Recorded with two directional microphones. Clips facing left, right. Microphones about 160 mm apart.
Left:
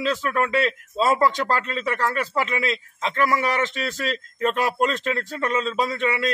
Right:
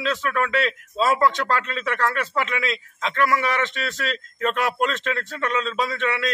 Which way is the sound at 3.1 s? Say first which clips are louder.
Even; 20° left (ahead or behind).